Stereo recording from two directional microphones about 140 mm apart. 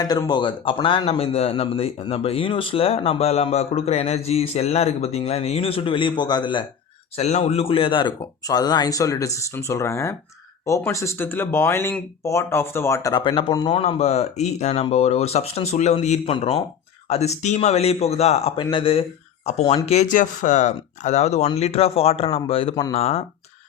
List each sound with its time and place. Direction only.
0.0 s a man's voice: 30° left (ahead or behind)
7.2 s speech: 50° left (ahead or behind); by 13.7 s 30° left (ahead or behind)
13.7 s a man's voice: 45° left (ahead or behind)